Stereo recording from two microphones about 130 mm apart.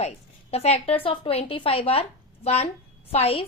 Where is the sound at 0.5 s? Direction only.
50° left (ahead or behind).